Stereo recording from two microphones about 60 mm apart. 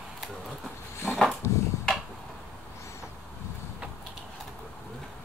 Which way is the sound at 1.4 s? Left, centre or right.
Left.